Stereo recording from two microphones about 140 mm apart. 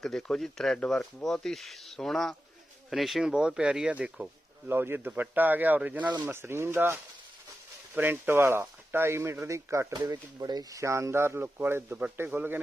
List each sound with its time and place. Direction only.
0.0 s speech: 5° left (ahead or behind); by 12.5 s 15° right (ahead or behind)